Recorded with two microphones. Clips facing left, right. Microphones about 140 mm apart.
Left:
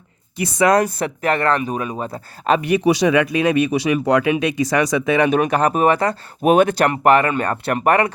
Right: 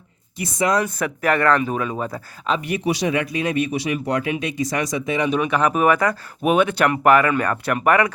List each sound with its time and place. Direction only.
0.3 s speech: 70° left (ahead or behind)
0.8 s speech: 35° left (ahead or behind)
2.5 s speech: 75° left (ahead or behind); by 6.5 s 30° left (ahead or behind)
6.5 s speech: 40° left (ahead or behind)